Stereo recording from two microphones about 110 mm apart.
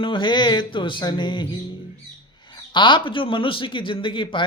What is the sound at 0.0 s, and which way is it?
Speech, 45° left (ahead or behind).